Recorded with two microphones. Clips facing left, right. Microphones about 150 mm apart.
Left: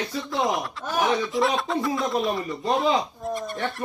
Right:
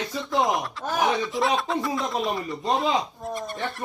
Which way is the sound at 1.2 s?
Centre (ahead or behind).